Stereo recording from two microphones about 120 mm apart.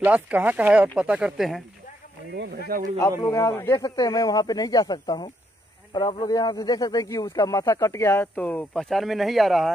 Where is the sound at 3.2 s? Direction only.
25° left (ahead or behind).